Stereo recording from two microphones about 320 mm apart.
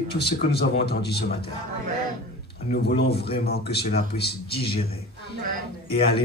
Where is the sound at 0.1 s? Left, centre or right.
Left.